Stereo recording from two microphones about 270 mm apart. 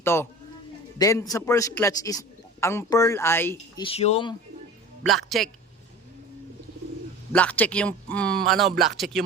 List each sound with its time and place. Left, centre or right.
0.0 s a man's voice: centre
3.8 s speech: left
5.0 s speech: centre
7.3 s speech: centre